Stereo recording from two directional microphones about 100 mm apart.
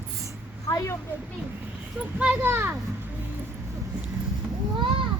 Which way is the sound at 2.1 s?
15° right (ahead or behind).